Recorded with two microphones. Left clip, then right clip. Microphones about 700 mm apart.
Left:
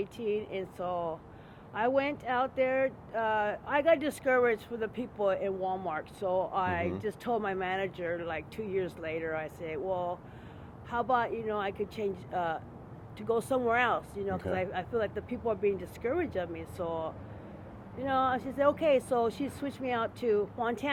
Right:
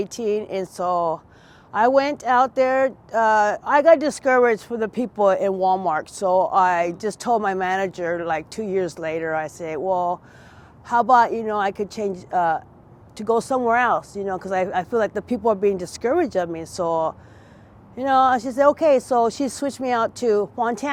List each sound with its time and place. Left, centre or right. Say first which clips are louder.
0.0 s speech: right 10 dB; right